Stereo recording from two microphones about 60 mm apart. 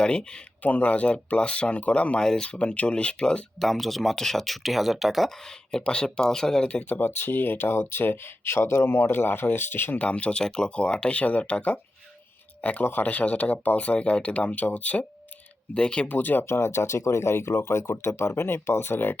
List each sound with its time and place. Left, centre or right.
0.0 s speech: centre
0.6 s speech: left
3.6 s speech: centre
6.7 s speech: left
10.0 s speech: left
12.8 s speech: left
15.7 s speech: centre
16.0 s speech: left